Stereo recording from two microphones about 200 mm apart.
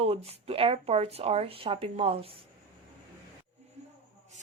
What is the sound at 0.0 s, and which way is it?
Speech, 30° right (ahead or behind).